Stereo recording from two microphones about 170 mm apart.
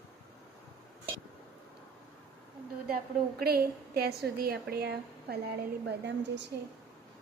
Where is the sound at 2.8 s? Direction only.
60° right (ahead or behind).